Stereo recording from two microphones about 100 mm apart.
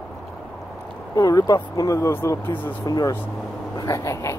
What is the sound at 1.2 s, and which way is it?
Speech, 40° left (ahead or behind).